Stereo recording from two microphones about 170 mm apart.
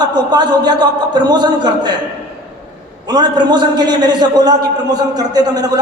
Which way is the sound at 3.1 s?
25° right (ahead or behind).